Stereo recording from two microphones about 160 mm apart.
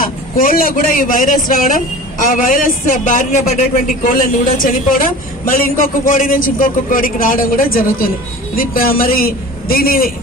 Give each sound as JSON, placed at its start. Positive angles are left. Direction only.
{"t": 0.0, "sound": "a woman's voice", "side_deg": 60}